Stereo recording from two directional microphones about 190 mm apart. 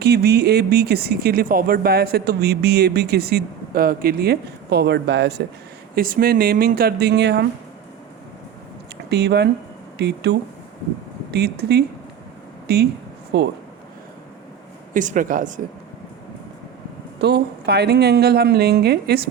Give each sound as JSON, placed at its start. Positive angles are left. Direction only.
{"t": 0.0, "sound": "speech", "side_deg": -55}
{"t": 5.9, "sound": "speech", "side_deg": -50}
{"t": 9.0, "sound": "speech", "side_deg": -60}
{"t": 14.9, "sound": "speech", "side_deg": -45}
{"t": 17.2, "sound": "speech", "side_deg": -60}